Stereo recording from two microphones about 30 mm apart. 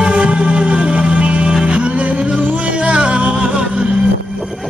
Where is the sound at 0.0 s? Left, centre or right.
Right.